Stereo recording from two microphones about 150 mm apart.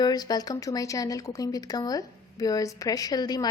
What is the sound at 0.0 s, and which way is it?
Speech, 25° left (ahead or behind).